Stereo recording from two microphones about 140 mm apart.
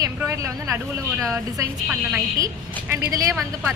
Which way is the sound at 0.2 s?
20° right (ahead or behind).